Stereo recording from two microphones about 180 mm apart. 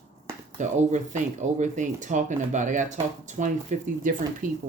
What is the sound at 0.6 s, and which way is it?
Speech, 45° right (ahead or behind).